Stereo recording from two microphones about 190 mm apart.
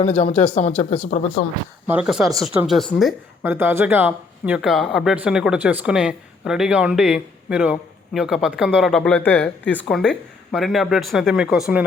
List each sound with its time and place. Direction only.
0.4 s speech: 30° left (ahead or behind)
1.9 s speech: 5° right (ahead or behind)
3.4 s speech: 10° right (ahead or behind)